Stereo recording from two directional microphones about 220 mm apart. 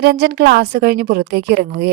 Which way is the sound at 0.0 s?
45° right (ahead or behind).